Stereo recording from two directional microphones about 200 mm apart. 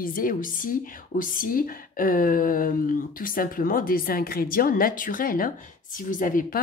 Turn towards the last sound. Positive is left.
turn(degrees=45)  # may be behind; listen again after turning